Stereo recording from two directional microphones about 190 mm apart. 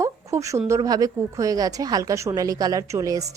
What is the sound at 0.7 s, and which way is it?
A woman's voice, 20° right (ahead or behind).